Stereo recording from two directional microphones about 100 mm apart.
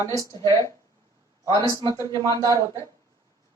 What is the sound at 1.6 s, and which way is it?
Speech, 35° left (ahead or behind).